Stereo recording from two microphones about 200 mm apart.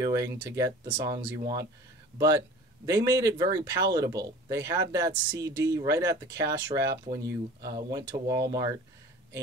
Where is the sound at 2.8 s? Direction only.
20° right (ahead or behind).